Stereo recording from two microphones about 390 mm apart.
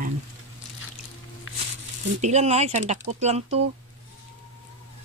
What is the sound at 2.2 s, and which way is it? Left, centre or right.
Speech, centre.